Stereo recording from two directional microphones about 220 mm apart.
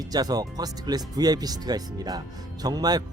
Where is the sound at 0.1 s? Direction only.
15° right (ahead or behind).